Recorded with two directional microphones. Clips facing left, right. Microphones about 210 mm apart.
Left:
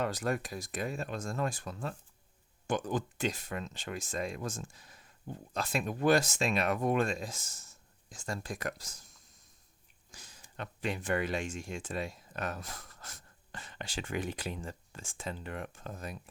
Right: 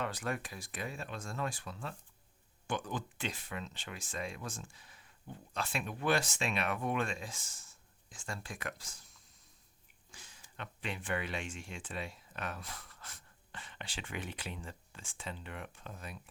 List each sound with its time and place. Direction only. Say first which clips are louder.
0.0 s speech: left 5 dB; 40° left (ahead or behind)
10.1 s a sound: left 2 dB; 40° left (ahead or behind)
10.6 s speech: left 6 dB; 40° left (ahead or behind)